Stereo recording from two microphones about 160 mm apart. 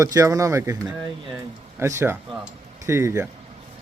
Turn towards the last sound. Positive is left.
turn(degrees=-20)  # may be behind; listen again after turning